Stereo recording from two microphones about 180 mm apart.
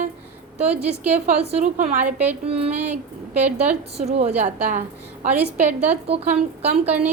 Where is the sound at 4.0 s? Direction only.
35° right (ahead or behind).